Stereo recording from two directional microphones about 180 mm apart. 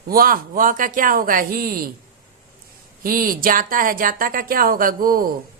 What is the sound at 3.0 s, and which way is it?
A woman's voice, 50° right (ahead or behind).